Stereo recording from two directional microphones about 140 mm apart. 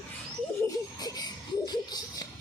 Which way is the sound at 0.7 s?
25° left (ahead or behind).